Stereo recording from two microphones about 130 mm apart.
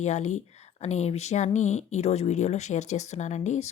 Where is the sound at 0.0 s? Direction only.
65° left (ahead or behind).